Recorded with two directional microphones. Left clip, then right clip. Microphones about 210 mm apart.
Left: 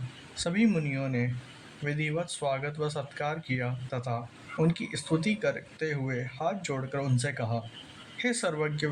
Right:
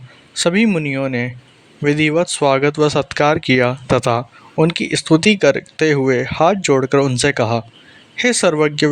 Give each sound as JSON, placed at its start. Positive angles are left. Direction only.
{"t": 0.3, "sound": "speech", "side_deg": -45}